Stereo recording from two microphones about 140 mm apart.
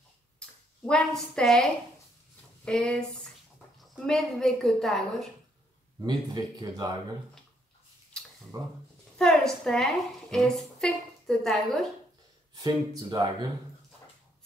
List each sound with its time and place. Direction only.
0.4 s a woman's voice: 5° left (ahead or behind)
5.9 s speech: 25° right (ahead or behind)
8.2 s a sound: 5° left (ahead or behind)
8.5 s speech: 25° right (ahead or behind)
9.2 s a woman's voice: 5° left (ahead or behind)
12.5 s speech: 25° right (ahead or behind)